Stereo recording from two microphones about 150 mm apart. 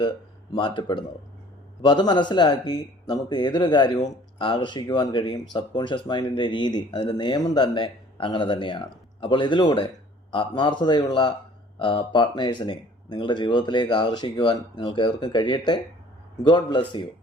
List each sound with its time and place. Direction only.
0.5 s a man's voice: 35° left (ahead or behind)